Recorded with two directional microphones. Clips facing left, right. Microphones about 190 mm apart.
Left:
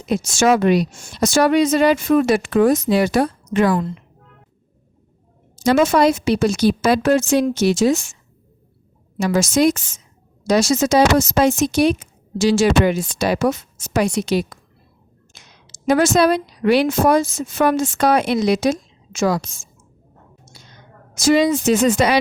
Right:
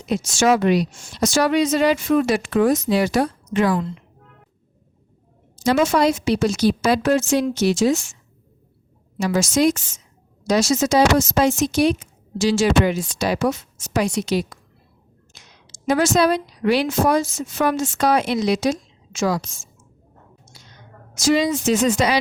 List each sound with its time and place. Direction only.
0.0 s speech: 50° left (ahead or behind)
5.6 s a woman's voice: 55° left (ahead or behind)
9.1 s a woman's voice: 55° left (ahead or behind)
15.9 s a woman's voice: 55° left (ahead or behind)
20.5 s a sound: 55° left (ahead or behind)
21.2 s a woman's voice: 55° left (ahead or behind)